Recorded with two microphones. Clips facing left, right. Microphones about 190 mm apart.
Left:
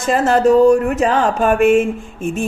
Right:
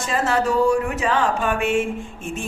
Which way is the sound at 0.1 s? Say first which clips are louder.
Left 9 dB; 45° left (ahead or behind).